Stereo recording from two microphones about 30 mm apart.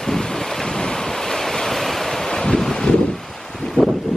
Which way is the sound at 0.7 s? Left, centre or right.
Left.